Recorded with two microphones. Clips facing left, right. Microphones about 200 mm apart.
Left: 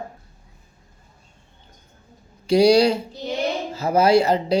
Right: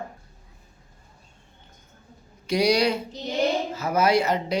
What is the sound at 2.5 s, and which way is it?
Speech, 30° left (ahead or behind).